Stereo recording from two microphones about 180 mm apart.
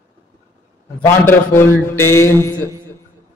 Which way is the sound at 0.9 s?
10° left (ahead or behind).